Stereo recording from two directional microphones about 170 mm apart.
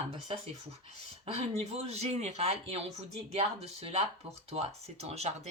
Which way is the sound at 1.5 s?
40° right (ahead or behind).